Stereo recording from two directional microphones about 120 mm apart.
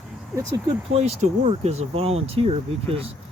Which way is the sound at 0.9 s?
65° right (ahead or behind).